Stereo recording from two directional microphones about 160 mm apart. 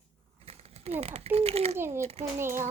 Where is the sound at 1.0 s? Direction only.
40° right (ahead or behind).